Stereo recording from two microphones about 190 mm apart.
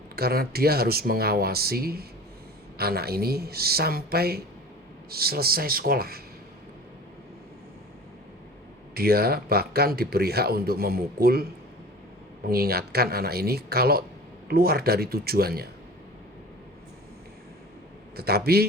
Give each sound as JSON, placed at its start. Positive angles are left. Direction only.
{"t": 0.2, "sound": "speech", "side_deg": -55}
{"t": 9.0, "sound": "speech", "side_deg": -55}
{"t": 12.5, "sound": "speech", "side_deg": -55}
{"t": 18.2, "sound": "speech", "side_deg": -55}